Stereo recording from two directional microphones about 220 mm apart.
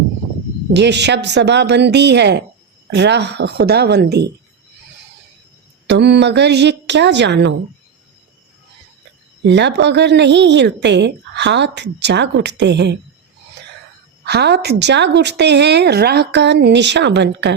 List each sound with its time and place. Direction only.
0.7 s a woman's voice: 50° right (ahead or behind)
5.9 s a woman's voice: 50° right (ahead or behind)
9.5 s a woman's voice: 50° right (ahead or behind)
14.3 s a woman's voice: 50° right (ahead or behind)